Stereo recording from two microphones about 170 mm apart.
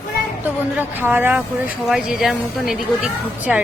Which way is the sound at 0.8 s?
10° right (ahead or behind).